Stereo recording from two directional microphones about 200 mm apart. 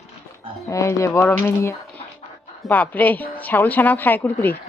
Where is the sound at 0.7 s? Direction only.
15° left (ahead or behind).